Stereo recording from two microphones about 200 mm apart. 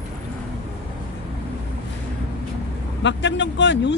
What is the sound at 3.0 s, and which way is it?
Speech, 65° left (ahead or behind).